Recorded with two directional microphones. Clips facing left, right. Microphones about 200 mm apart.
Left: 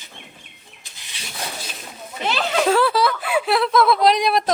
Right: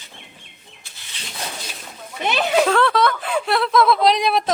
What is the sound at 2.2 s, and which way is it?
Speech, 15° right (ahead or behind).